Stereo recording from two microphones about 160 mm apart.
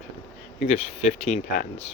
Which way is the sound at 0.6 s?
40° left (ahead or behind).